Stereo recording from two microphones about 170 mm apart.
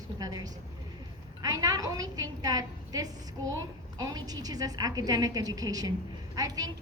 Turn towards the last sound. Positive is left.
turn(degrees=-20)  # may be behind; listen again after turning